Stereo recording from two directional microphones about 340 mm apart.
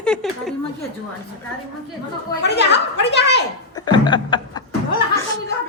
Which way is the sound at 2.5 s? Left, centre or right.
Left.